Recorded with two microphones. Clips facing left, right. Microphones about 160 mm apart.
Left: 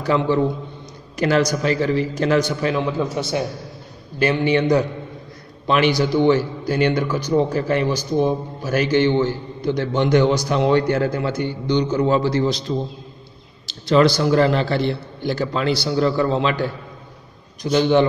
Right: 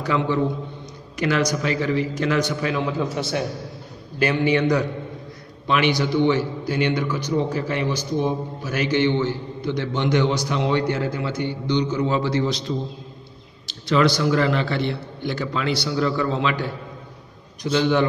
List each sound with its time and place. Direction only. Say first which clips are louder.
0.0 s a man's voice: left 3 dB; 35° left (ahead or behind)
3.2 s a man's voice: left 2 dB; 20° left (ahead or behind); by 16.6 s 35° left (ahead or behind)
17.7 s a man's voice: left 4 dB; 30° left (ahead or behind)